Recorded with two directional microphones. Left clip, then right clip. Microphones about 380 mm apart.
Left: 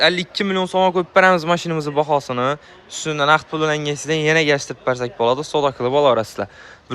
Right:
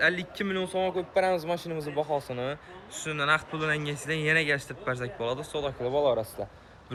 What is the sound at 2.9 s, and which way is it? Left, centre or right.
Speech, centre.